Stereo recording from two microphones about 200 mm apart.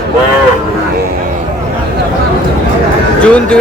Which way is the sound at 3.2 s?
5° left (ahead or behind).